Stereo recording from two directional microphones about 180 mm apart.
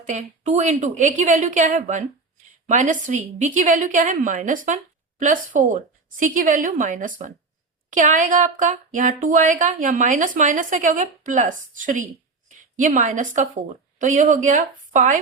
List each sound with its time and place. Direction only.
0.0 s a woman's voice: 40° right (ahead or behind)